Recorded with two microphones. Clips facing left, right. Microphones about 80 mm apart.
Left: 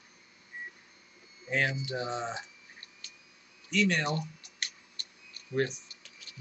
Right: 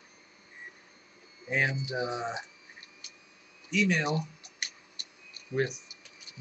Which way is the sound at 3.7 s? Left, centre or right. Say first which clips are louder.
Right 1 dB; centre.